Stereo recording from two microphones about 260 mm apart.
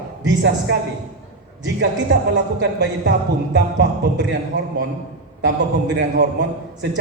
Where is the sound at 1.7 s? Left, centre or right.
Right.